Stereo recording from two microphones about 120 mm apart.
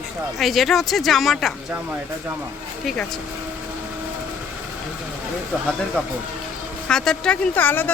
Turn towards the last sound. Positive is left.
turn(degrees=15)  # may be behind; listen again after turning